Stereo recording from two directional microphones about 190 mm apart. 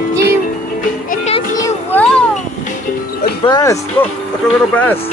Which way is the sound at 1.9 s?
5° left (ahead or behind).